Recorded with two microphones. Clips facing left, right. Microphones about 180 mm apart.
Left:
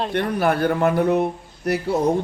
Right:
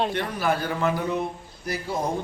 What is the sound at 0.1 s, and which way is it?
A man's voice, 60° left (ahead or behind).